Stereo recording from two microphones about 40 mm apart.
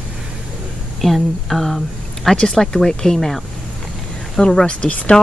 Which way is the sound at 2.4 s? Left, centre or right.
Centre.